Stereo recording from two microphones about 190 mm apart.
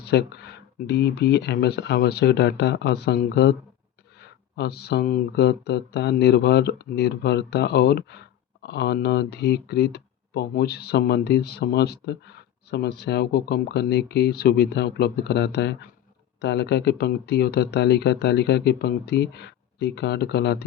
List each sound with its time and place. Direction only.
0.0 s speech: 60° left (ahead or behind)